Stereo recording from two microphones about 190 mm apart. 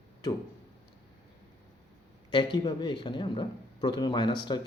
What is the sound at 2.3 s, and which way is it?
Speech, 25° left (ahead or behind).